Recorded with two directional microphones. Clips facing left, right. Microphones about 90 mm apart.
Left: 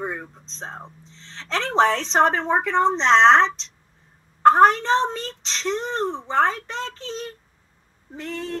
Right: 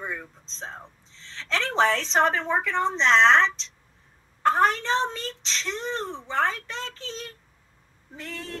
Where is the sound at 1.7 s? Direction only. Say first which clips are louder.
Left 4 dB; 40° left (ahead or behind).